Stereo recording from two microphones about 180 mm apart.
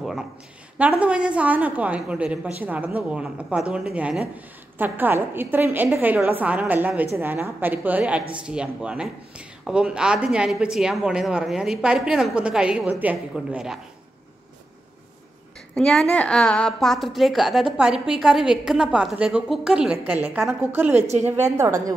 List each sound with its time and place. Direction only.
0.7 s a woman's voice: 5° right (ahead or behind)
15.7 s a woman's voice: centre (ahead or behind); by 21.9 s 15° right (ahead or behind)